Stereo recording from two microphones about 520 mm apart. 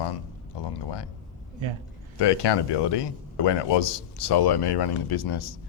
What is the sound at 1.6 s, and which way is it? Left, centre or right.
Speech, right.